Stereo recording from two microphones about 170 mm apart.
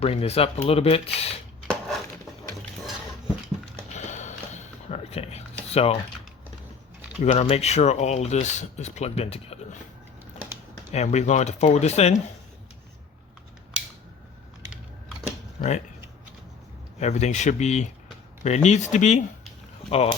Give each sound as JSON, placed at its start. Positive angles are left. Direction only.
{"t": 0.0, "sound": "speech", "side_deg": 35}
{"t": 1.6, "sound": "dishes", "side_deg": 5}
{"t": 3.9, "sound": "a sound", "side_deg": 45}
{"t": 7.2, "sound": "speech", "side_deg": 40}
{"t": 10.9, "sound": "speech", "side_deg": 40}
{"t": 17.0, "sound": "speech", "side_deg": 45}